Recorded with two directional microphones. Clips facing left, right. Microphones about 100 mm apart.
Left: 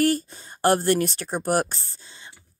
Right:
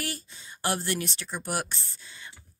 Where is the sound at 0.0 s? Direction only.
45° left (ahead or behind).